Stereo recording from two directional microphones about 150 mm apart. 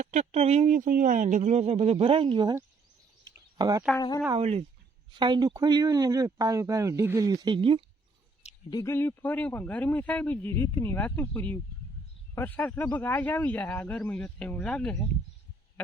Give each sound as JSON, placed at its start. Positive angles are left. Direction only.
{"t": 0.0, "sound": "speech", "side_deg": -50}
{"t": 3.6, "sound": "speech", "side_deg": -25}
{"t": 4.4, "sound": "speech", "side_deg": -40}
{"t": 5.1, "sound": "speech", "side_deg": -30}
{"t": 7.4, "sound": "speech", "side_deg": -35}
{"t": 8.7, "sound": "speech", "side_deg": 15}